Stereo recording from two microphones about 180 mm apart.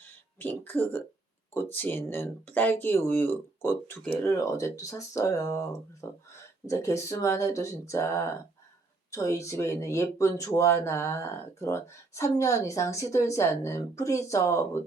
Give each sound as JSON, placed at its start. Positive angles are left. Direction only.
{"t": 0.0, "sound": "speech", "side_deg": 10}